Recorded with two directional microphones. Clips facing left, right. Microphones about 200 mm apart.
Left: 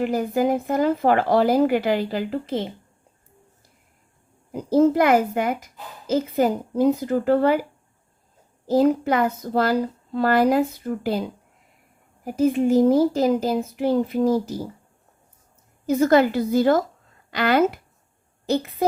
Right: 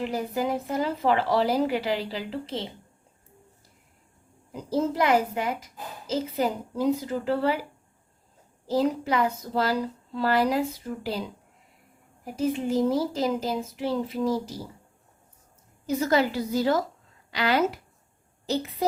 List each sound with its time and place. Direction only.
0.0 s a woman's voice: 55° left (ahead or behind)
4.5 s a child's voice: 55° left (ahead or behind)
8.7 s a woman's voice: 55° left (ahead or behind)
15.9 s a child's voice: 55° left (ahead or behind)